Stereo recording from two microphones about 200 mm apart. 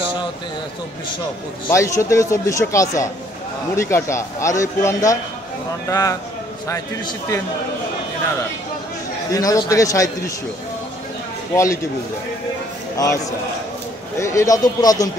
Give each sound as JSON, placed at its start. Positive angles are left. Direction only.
{"t": 1.7, "sound": "a man's voice", "side_deg": 15}
{"t": 9.3, "sound": "a man's voice", "side_deg": 15}
{"t": 11.5, "sound": "a man's voice", "side_deg": 15}
{"t": 12.9, "sound": "a man's voice", "side_deg": 15}
{"t": 14.2, "sound": "a man's voice", "side_deg": 15}